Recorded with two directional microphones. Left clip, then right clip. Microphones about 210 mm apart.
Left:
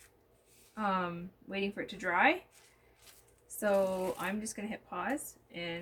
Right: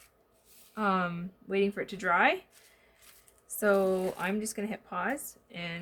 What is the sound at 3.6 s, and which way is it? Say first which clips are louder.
Speech: right 4 dB; 45° right (ahead or behind).